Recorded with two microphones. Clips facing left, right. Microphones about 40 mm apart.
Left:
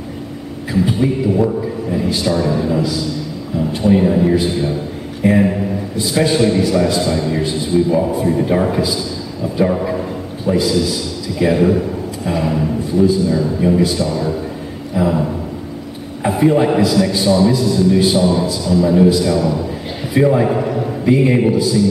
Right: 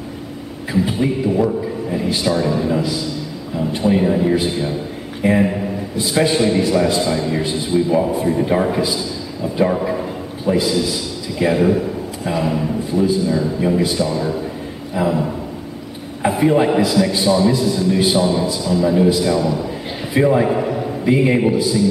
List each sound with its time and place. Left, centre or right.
0.8 s a man's voice: centre
15.0 s a man's voice: centre
16.2 s a man's voice: centre
20.2 s a sound: centre
21.1 s a man's voice: centre